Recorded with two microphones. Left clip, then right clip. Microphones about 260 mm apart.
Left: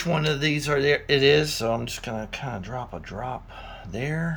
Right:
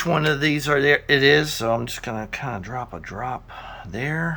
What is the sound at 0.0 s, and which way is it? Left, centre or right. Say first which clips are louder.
Speech: right 4 dB; centre.